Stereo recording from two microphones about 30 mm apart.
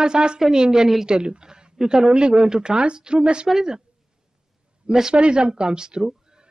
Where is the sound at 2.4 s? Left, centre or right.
Right.